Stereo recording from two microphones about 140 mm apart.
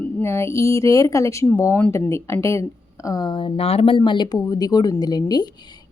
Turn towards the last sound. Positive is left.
turn(degrees=30)  # may be behind; listen again after turning